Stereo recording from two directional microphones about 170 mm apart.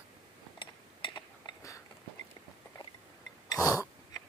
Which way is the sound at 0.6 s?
30° left (ahead or behind).